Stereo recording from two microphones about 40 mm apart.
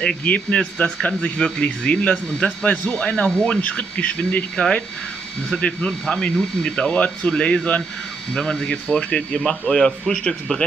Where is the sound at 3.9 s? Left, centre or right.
Left.